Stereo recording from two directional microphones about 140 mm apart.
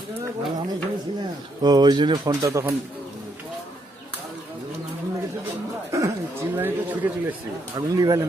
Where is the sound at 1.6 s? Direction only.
30° right (ahead or behind).